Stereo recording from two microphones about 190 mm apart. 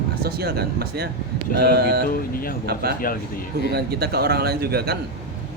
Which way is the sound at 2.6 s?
55° right (ahead or behind).